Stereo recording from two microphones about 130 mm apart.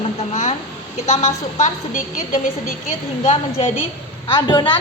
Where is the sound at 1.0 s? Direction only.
55° left (ahead or behind); by 2.7 s 90° left.